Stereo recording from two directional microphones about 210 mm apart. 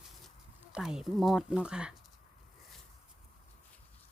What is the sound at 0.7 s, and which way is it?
Speech, centre (ahead or behind).